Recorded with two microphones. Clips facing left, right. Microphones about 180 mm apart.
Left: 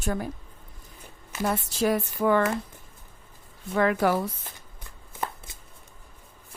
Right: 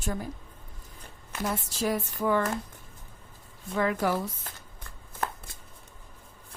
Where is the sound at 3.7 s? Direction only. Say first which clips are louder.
Left 4 dB; 70° left (ahead or behind).